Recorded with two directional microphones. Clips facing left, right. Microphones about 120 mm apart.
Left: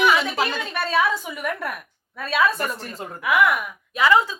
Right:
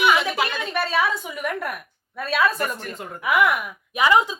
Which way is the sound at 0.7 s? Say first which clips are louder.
Left 1 dB; centre (ahead or behind).